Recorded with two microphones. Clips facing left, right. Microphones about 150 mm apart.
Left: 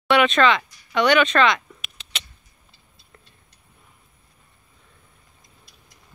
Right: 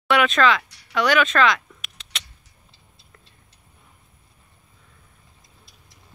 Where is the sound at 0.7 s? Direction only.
75° right (ahead or behind).